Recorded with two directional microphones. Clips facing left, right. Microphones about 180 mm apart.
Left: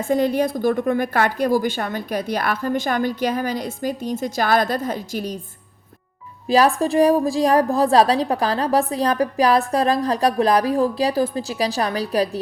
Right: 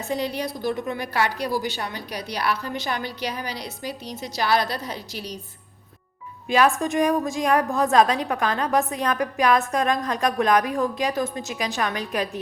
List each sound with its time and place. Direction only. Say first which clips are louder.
0.0 s a woman's voice: left 8 dB; 50° left (ahead or behind)
6.5 s a woman's voice: left 4 dB; 35° left (ahead or behind)